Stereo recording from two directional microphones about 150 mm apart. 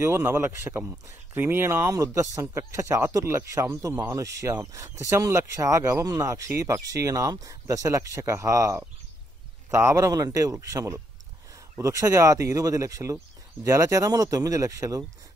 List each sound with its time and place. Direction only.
0.0 s speech: 15° right (ahead or behind)